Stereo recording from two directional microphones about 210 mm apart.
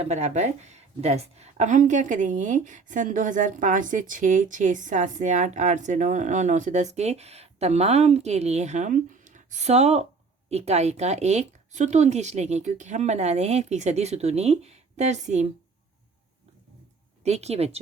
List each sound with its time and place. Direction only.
0.0 s a woman's voice: 35° right (ahead or behind)
17.2 s a woman's voice: 30° right (ahead or behind)